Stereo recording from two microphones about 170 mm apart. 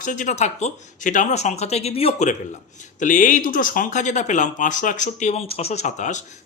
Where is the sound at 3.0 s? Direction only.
50° left (ahead or behind).